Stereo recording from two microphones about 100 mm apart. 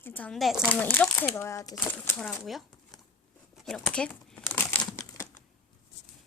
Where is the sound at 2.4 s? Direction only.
Centre (ahead or behind).